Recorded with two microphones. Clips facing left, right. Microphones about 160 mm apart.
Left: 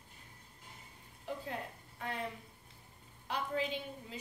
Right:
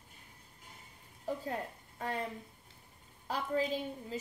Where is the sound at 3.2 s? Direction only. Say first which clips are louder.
Right 3 dB; 40° right (ahead or behind).